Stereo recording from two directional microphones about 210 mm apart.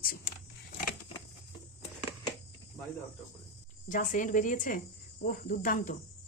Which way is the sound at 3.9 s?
40° left (ahead or behind).